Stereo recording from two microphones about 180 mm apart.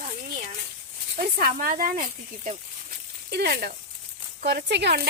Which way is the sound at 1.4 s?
50° right (ahead or behind).